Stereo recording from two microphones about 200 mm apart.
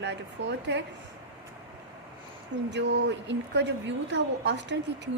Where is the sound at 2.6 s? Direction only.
60° right (ahead or behind).